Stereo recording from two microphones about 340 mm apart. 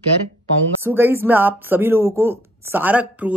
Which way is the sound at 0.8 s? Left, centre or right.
Centre.